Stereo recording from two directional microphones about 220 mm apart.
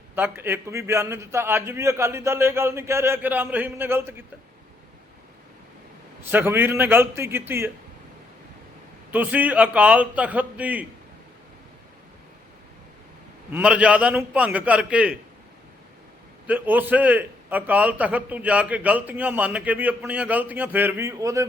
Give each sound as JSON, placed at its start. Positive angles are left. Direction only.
{"t": 0.2, "sound": "a man's voice", "side_deg": -10}
{"t": 6.3, "sound": "a man's voice", "side_deg": -10}
{"t": 9.1, "sound": "a man's voice", "side_deg": -5}
{"t": 13.5, "sound": "a man's voice", "side_deg": -5}
{"t": 16.5, "sound": "a man's voice", "side_deg": -5}